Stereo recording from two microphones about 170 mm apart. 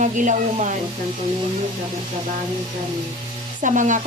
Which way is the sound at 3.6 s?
50° right (ahead or behind).